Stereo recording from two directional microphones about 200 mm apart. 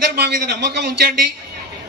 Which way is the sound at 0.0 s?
50° right (ahead or behind).